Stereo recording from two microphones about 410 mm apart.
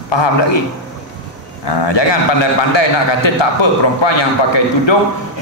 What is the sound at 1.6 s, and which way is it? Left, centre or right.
A man's voice, left.